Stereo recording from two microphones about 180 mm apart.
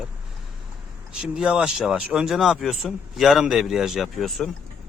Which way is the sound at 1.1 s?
5° right (ahead or behind).